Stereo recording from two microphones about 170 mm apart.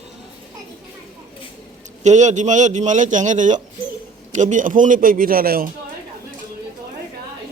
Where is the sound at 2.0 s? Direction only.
45° right (ahead or behind).